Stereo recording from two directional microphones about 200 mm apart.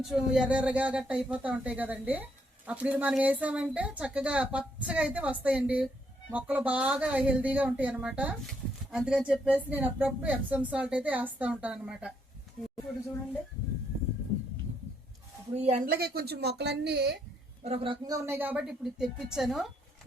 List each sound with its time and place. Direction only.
0.0 s a woman's voice: 5° right (ahead or behind)
15.5 s speech: 35° right (ahead or behind)
15.9 s speech: 50° right (ahead or behind)
17.6 s a woman's voice: 30° right (ahead or behind); by 19.7 s centre (ahead or behind)